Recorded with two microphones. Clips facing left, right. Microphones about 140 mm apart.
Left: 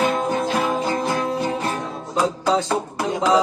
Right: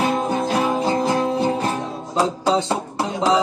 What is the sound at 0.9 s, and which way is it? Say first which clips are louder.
Music: right 3 dB; 30° right (ahead or behind).